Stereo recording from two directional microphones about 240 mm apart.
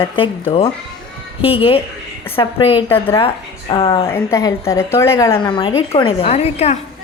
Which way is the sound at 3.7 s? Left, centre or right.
Left.